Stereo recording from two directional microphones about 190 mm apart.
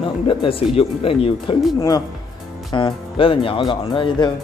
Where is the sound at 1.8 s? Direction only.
20° left (ahead or behind).